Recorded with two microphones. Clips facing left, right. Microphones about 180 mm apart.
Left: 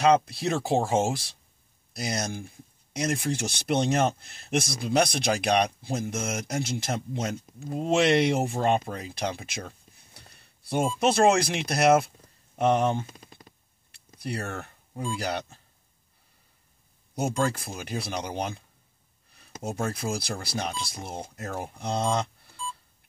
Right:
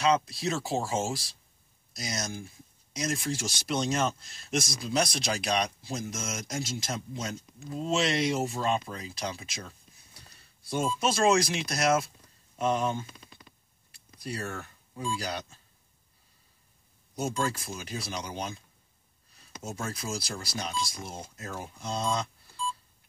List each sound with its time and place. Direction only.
0.0 s speech: 55° left (ahead or behind)
2.0 s speech: 55° left (ahead or behind)
13.0 s a sound: 40° left (ahead or behind)
13.9 s speech: 60° left (ahead or behind)
17.4 s speech: 55° left (ahead or behind)